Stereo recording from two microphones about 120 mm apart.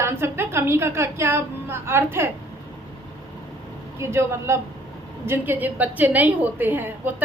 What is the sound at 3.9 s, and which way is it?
A woman's voice, 20° right (ahead or behind).